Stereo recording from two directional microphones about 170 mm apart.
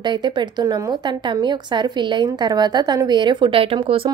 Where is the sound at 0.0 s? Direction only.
25° right (ahead or behind).